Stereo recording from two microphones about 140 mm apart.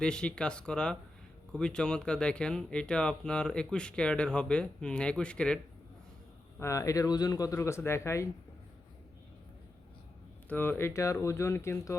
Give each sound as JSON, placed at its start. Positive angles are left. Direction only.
{"t": 0.0, "sound": "speech", "side_deg": 5}
{"t": 6.6, "sound": "speech", "side_deg": 20}
{"t": 10.5, "sound": "speech", "side_deg": 15}